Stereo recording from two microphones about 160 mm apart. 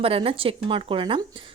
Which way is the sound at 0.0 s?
35° right (ahead or behind).